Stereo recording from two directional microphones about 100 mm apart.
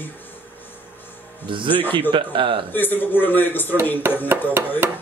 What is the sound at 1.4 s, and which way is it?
Speech, 55° right (ahead or behind).